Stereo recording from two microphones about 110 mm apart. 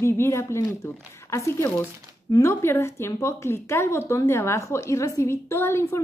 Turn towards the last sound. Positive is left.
turn(degrees=25)  # may be behind; listen again after turning